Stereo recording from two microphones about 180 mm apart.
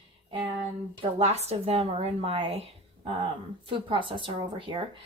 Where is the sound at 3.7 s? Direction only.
30° right (ahead or behind).